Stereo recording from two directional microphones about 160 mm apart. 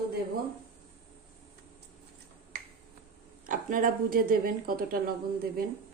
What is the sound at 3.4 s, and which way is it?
A woman's voice, 60° right (ahead or behind).